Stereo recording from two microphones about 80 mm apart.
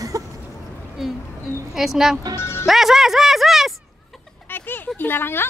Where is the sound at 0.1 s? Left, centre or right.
Right.